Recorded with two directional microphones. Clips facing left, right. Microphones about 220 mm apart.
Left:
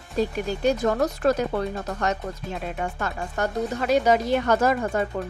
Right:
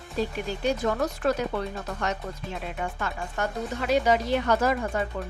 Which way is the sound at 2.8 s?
40° left (ahead or behind).